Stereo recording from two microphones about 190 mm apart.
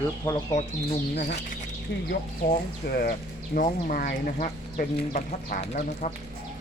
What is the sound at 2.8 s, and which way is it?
Speech, 55° left (ahead or behind).